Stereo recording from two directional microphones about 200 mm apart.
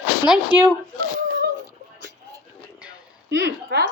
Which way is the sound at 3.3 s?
60° right (ahead or behind).